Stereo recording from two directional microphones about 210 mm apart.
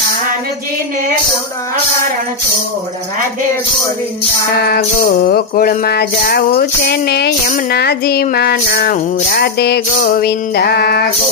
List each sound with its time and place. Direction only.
5.2 s music: 45° left (ahead or behind)